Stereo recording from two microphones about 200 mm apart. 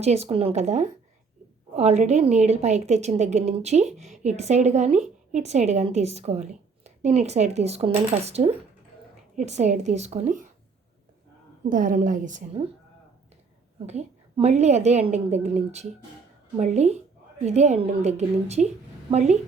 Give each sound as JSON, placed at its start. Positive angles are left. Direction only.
{"t": 0.0, "sound": "a woman's voice", "side_deg": -30}
{"t": 11.6, "sound": "a woman's voice", "side_deg": -40}
{"t": 13.8, "sound": "a woman's voice", "side_deg": -30}